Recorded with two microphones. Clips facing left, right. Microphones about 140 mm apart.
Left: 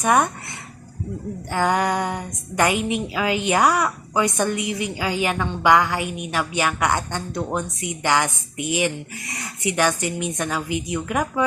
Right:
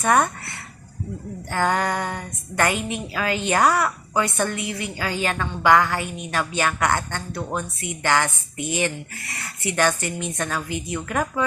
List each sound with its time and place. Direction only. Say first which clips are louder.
0.0 s a woman's voice: left 1 dB; 15° left (ahead or behind)
1.5 s a woman's voice: left 2 dB; 15° left (ahead or behind)